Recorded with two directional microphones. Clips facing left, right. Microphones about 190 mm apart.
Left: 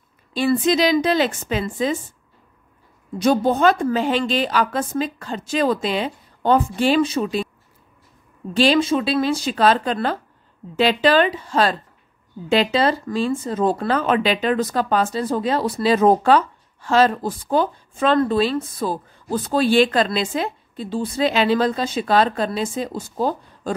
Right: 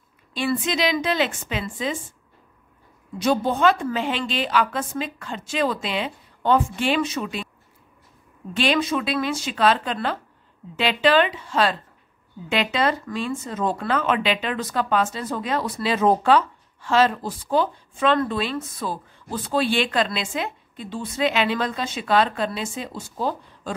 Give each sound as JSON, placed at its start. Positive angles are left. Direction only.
{"t": 0.3, "sound": "speech", "side_deg": 40}
{"t": 3.2, "sound": "speech", "side_deg": 45}
{"t": 8.5, "sound": "speech", "side_deg": 30}